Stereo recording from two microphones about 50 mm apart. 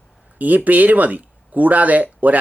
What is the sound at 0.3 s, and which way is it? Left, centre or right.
Speech, right.